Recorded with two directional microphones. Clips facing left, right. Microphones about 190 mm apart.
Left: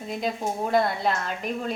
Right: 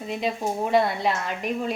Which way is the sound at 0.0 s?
5° right (ahead or behind).